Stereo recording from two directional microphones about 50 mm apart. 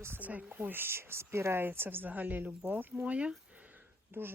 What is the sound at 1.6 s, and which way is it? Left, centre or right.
A woman's voice, right.